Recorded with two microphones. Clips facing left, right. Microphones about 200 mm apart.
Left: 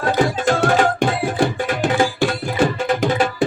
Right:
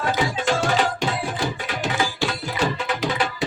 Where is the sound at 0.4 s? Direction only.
50° left (ahead or behind).